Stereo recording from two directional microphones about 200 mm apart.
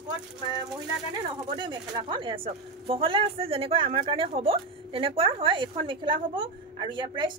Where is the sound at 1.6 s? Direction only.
25° right (ahead or behind).